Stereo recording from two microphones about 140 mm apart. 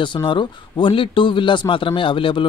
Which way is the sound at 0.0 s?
35° left (ahead or behind).